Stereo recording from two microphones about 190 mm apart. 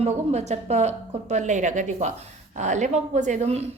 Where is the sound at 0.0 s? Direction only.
35° right (ahead or behind).